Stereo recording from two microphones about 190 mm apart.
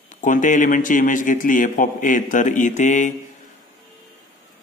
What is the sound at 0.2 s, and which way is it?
Speech, 40° left (ahead or behind).